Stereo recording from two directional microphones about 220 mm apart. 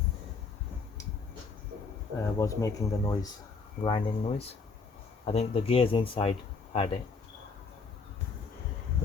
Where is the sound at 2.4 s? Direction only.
15° left (ahead or behind).